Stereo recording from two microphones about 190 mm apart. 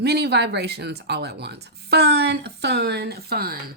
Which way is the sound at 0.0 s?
60° right (ahead or behind).